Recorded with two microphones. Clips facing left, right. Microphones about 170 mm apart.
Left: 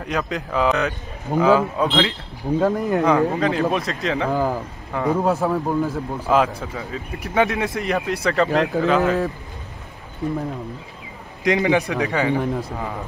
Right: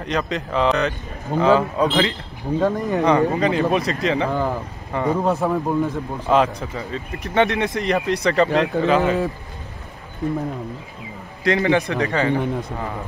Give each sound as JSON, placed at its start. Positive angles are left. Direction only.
{"t": 0.0, "sound": "speech", "side_deg": 5}
{"t": 11.4, "sound": "a man's voice", "side_deg": 15}
{"t": 11.9, "sound": "speech", "side_deg": 5}